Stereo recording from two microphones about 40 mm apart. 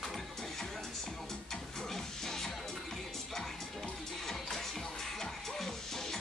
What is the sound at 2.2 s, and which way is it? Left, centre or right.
Music, centre.